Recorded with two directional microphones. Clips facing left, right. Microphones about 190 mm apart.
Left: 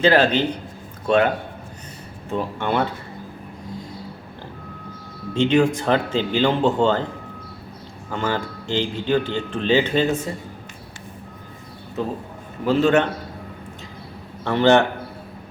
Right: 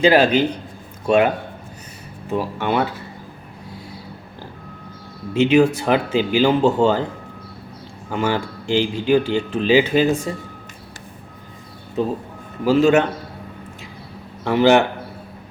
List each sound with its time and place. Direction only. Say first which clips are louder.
0.0 s speech: right 2 dB; 10° right (ahead or behind)
2.3 s speech: right 2 dB; 5° right (ahead or behind)
5.3 s speech: right 3 dB; 10° right (ahead or behind)
8.1 s speech: right 3 dB; 10° right (ahead or behind)
12.0 s speech: right 4 dB; 20° right (ahead or behind)
14.4 s speech: right 2 dB; 10° right (ahead or behind)